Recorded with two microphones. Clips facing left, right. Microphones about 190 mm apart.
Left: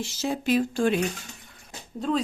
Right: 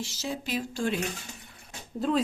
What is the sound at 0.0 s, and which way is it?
Speech, 55° left (ahead or behind).